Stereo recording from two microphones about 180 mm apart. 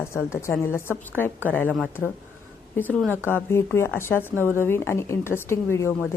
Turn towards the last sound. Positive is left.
turn(degrees=15)  # may be behind; listen again after turning